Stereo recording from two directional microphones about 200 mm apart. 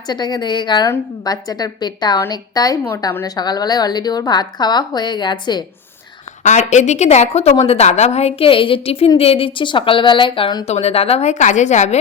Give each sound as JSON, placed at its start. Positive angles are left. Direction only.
{"t": 0.1, "sound": "a woman's voice", "side_deg": 20}
{"t": 6.4, "sound": "a woman's voice", "side_deg": 35}